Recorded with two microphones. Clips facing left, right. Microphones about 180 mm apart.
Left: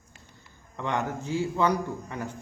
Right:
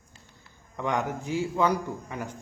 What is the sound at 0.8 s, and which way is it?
A man's voice, 15° right (ahead or behind).